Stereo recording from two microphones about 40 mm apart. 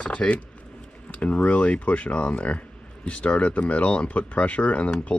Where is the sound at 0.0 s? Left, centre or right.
Left.